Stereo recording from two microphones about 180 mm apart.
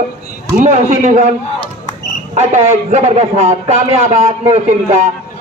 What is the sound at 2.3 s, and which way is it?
A man's voice, 40° right (ahead or behind).